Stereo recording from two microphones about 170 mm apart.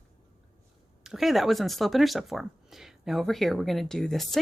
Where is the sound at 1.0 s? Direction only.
Centre (ahead or behind).